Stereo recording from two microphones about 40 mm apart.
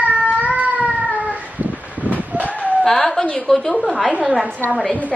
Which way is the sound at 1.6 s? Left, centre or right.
Right.